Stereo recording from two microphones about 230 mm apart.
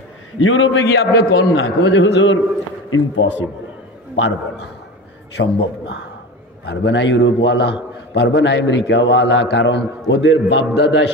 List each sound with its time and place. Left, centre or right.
0.4 s a man's voice: left
0.8 s a man's voice: left
1.6 s a man's voice: left
6.6 s a man's voice: left